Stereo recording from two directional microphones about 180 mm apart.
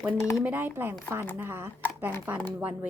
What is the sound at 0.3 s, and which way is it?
A woman's voice, 10° right (ahead or behind).